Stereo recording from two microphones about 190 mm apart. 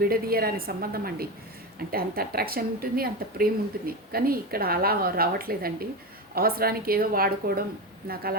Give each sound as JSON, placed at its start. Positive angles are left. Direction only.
{"t": 0.0, "sound": "a woman's voice", "side_deg": -50}